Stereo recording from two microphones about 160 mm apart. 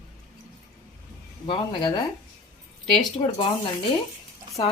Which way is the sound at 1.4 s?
30° left (ahead or behind).